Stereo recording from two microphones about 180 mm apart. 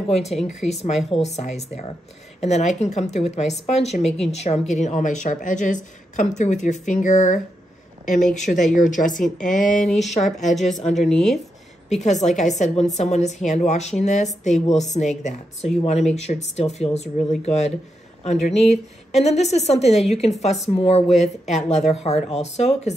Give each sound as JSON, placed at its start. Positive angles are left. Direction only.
{"t": 0.1, "sound": "a woman's voice", "side_deg": 35}
{"t": 10.2, "sound": "a woman's voice", "side_deg": 0}
{"t": 10.8, "sound": "a woman's voice", "side_deg": 40}
{"t": 11.1, "sound": "a woman's voice", "side_deg": 0}
{"t": 11.9, "sound": "a woman's voice", "side_deg": 40}